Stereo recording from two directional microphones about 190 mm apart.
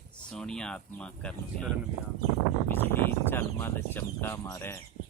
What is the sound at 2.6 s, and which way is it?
Speech, 10° left (ahead or behind).